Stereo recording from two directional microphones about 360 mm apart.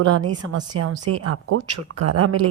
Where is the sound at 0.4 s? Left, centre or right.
Right.